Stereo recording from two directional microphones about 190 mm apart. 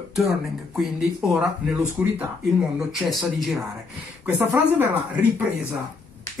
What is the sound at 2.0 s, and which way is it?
A woman's voice, 10° right (ahead or behind).